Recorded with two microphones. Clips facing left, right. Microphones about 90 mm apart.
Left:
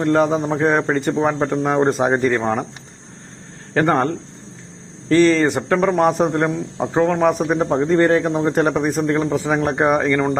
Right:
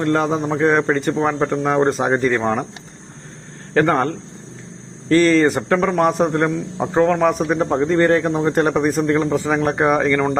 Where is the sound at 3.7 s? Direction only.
5° left (ahead or behind).